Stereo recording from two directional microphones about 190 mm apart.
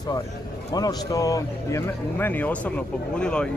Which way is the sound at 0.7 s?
20° left (ahead or behind).